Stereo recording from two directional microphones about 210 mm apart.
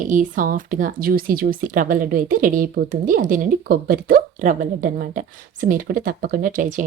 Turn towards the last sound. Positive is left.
turn(degrees=-40)  # may be behind; listen again after turning